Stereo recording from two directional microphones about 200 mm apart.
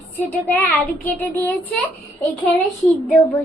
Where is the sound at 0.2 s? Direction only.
10° left (ahead or behind).